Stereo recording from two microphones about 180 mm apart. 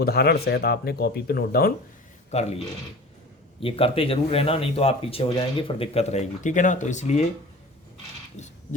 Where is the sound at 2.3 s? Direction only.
35° left (ahead or behind).